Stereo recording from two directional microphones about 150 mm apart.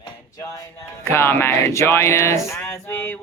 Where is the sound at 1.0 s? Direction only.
15° left (ahead or behind).